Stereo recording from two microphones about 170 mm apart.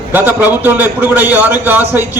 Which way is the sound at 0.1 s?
10° right (ahead or behind).